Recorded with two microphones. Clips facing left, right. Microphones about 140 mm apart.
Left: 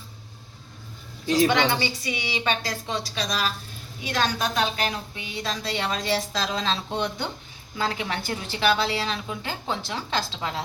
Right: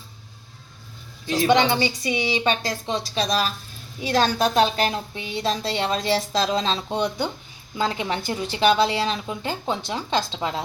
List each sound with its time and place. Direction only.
1.5 s a woman's voice: 20° right (ahead or behind)